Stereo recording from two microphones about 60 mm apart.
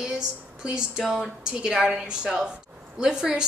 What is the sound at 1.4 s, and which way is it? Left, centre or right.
A woman's voice, centre.